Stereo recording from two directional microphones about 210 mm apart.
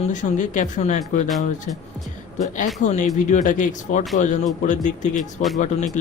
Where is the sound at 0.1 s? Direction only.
35° left (ahead or behind).